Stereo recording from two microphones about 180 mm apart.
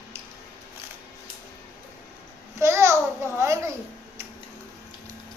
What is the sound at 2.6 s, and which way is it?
Babbling, 15° right (ahead or behind).